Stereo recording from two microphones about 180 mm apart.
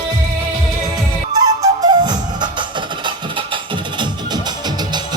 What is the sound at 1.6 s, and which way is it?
Music, 20° right (ahead or behind).